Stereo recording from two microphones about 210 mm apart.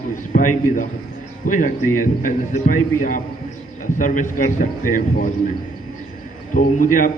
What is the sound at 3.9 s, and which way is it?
A man's voice, 40° left (ahead or behind).